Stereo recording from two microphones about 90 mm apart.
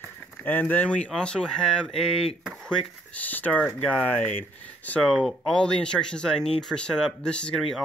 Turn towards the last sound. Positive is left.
turn(degrees=5)  # may be behind; listen again after turning